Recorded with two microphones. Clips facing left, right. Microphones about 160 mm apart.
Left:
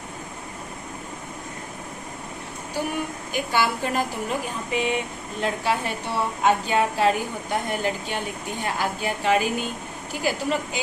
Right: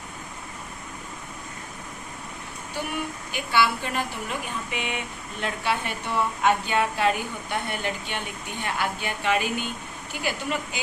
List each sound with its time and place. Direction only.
3.3 s a woman's voice: 40° left (ahead or behind)